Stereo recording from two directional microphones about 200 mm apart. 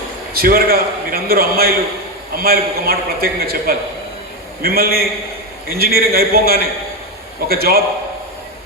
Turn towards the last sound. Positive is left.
turn(degrees=-50)  # may be behind; listen again after turning